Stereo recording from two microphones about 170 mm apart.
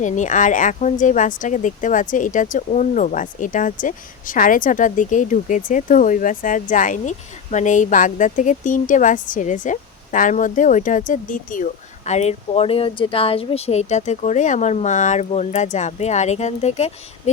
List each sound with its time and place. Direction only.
0.0 s speech: 45° left (ahead or behind)